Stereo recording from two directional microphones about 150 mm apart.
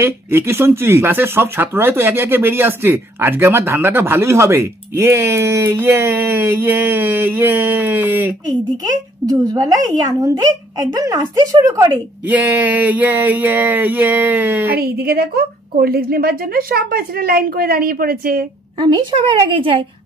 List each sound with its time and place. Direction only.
0.0 s speech: 15° right (ahead or behind)
9.2 s speech: 25° right (ahead or behind)
12.3 s speech: 10° right (ahead or behind)
14.7 s a woman's voice: 90° right; by 18.4 s 75° right (ahead or behind)
18.8 s a woman's voice: 30° right (ahead or behind)